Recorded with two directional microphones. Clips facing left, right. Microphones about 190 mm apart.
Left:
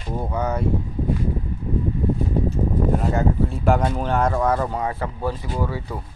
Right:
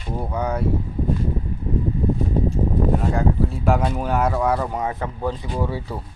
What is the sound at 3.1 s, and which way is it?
Speech, centre (ahead or behind).